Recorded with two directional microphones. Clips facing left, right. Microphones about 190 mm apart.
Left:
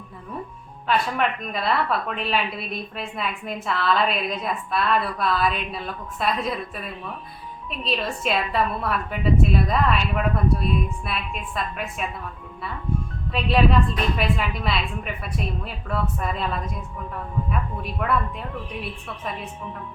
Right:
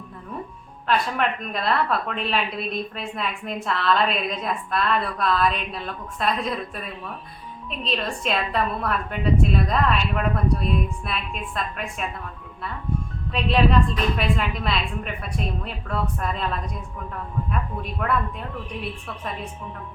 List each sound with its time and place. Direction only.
0.9 s a woman's voice: centre (ahead or behind)
13.3 s a woman's voice: centre (ahead or behind)
18.0 s a woman's voice: centre (ahead or behind)